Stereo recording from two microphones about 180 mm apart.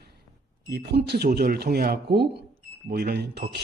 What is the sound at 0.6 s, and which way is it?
A man's voice, 65° right (ahead or behind).